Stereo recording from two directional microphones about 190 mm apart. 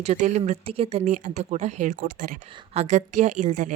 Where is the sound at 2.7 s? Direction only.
35° right (ahead or behind).